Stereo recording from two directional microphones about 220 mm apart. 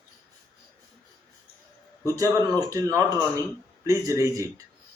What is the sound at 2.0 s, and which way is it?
Speech, 15° right (ahead or behind).